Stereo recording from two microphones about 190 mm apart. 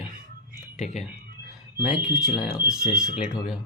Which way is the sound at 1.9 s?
5° right (ahead or behind).